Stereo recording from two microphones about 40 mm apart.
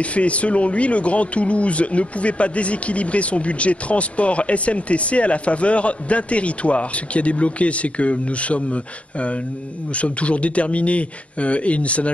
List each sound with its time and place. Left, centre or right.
0.0 s speech: left
9.9 s speech: left